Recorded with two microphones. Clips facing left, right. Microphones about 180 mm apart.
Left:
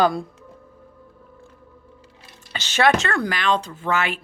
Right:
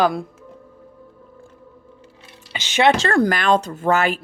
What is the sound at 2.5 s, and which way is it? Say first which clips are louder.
Speech: right 2 dB; 15° right (ahead or behind).